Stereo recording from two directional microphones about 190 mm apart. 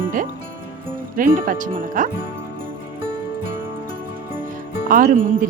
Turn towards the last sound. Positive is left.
turn(degrees=-45)  # may be behind; listen again after turning